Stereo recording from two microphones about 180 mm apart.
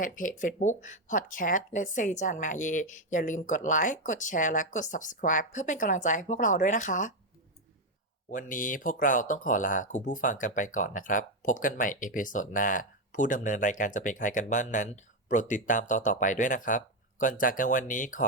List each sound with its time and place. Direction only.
0.0 s speech: 45° left (ahead or behind)
8.3 s speech: 45° left (ahead or behind)